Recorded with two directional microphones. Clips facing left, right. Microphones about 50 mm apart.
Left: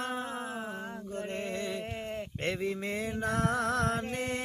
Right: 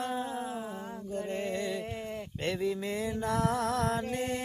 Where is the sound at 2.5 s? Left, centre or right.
Left.